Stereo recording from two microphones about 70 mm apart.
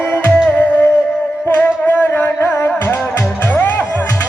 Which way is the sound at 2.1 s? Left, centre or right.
Left.